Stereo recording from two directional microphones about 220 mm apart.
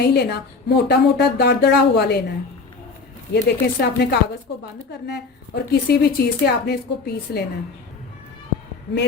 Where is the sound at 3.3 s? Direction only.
50° left (ahead or behind).